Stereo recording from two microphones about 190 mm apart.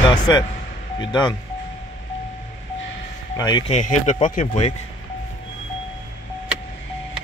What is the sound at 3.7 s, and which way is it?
Speech, 40° left (ahead or behind).